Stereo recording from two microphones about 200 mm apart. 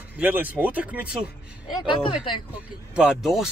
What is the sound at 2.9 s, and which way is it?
Speech, 5° right (ahead or behind).